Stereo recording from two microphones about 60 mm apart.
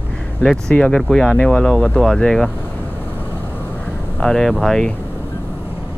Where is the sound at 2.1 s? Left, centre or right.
Centre.